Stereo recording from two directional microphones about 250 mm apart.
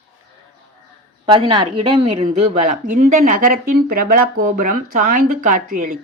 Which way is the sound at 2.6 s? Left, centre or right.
Right.